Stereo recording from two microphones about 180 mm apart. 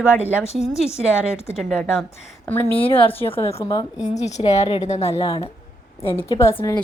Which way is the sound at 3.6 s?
20° left (ahead or behind).